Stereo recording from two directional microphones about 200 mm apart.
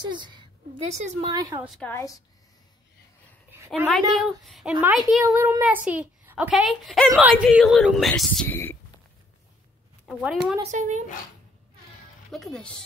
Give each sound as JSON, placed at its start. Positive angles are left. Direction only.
{"t": 0.0, "sound": "a woman's voice", "side_deg": -25}
{"t": 1.6, "sound": "speech", "side_deg": 0}
{"t": 1.9, "sound": "a woman's voice", "side_deg": 15}
{"t": 3.5, "sound": "a sound", "side_deg": -10}
{"t": 4.2, "sound": "speech", "side_deg": 0}
{"t": 5.2, "sound": "a child's voice", "side_deg": -15}
{"t": 10.0, "sound": "speech", "side_deg": -5}
{"t": 10.7, "sound": "speech", "side_deg": -35}
{"t": 12.3, "sound": "speech", "side_deg": 0}